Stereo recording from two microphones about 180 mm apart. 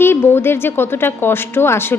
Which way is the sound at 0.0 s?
10° left (ahead or behind).